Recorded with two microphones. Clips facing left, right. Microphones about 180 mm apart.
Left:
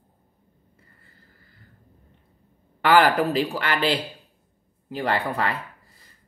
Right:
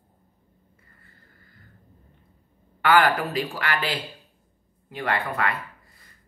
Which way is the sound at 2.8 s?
35° left (ahead or behind).